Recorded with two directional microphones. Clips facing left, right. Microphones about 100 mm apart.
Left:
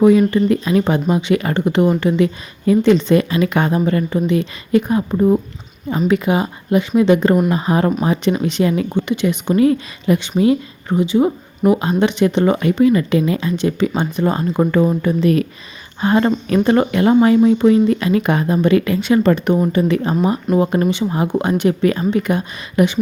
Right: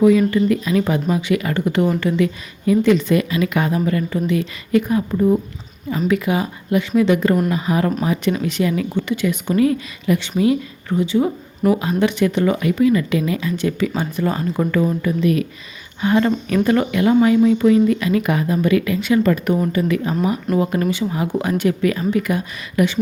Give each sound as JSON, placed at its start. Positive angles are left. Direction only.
{"t": 0.0, "sound": "speech", "side_deg": 30}
{"t": 8.9, "sound": "speech", "side_deg": 20}
{"t": 10.9, "sound": "speech", "side_deg": 20}